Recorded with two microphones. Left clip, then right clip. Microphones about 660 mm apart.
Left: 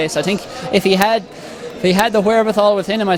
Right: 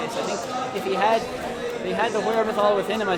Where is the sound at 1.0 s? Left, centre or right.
Left.